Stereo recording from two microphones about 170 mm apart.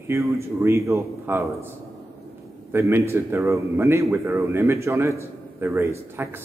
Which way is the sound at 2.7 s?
15° right (ahead or behind).